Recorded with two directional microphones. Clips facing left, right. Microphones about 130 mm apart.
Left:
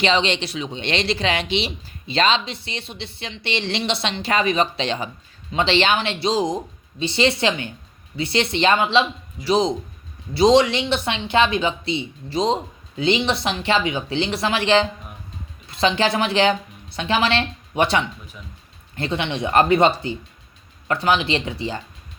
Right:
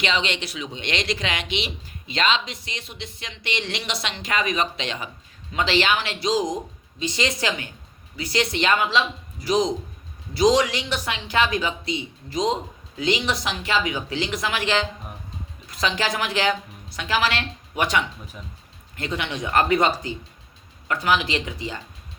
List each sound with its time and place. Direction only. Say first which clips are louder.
0.0 s a woman's voice: left 5 dB; 30° left (ahead or behind)